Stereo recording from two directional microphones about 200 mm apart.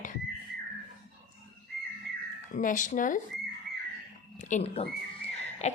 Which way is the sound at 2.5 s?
40° left (ahead or behind).